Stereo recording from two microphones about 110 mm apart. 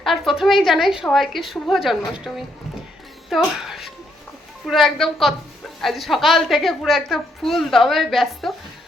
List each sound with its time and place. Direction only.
0.0 s a woman's voice: centre (ahead or behind)